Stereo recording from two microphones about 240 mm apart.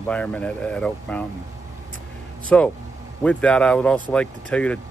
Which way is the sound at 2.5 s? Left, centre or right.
Centre.